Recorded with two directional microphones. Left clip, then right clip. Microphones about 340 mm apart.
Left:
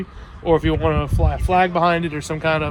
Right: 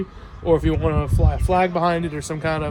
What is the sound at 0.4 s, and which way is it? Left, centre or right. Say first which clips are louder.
Speech: left 2 dB; centre.